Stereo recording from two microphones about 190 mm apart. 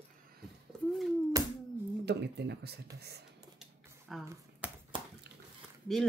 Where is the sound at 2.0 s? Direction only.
65° right (ahead or behind).